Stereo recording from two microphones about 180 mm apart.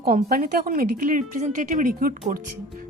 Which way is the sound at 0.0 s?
55° right (ahead or behind).